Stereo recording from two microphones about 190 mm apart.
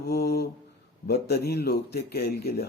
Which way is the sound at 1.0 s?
55° left (ahead or behind).